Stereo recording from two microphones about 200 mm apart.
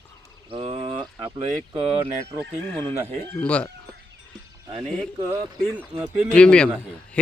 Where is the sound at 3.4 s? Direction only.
5° left (ahead or behind).